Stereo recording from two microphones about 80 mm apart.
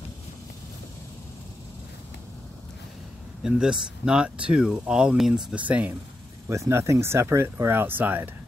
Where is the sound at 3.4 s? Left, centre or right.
Centre.